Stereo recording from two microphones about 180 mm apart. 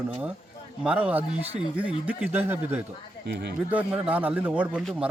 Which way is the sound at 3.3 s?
70° right (ahead or behind).